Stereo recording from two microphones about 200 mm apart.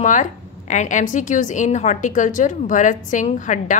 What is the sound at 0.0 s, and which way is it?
A woman's voice, 40° left (ahead or behind).